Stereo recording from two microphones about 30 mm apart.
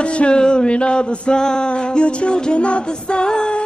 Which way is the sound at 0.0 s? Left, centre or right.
Left.